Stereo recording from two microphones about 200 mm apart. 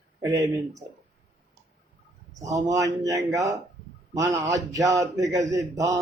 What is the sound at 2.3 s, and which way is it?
Speech, 15° right (ahead or behind).